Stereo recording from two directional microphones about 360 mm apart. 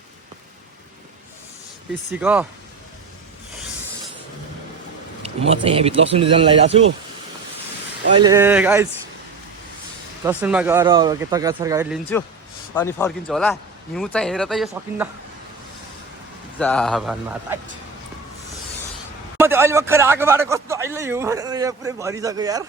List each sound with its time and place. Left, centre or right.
2.1 s a man's voice: centre
5.5 s speech: centre
8.1 s speech: centre
10.2 s speech: centre
12.7 s a man's voice: centre
16.6 s a man's voice: centre
19.4 s speech: centre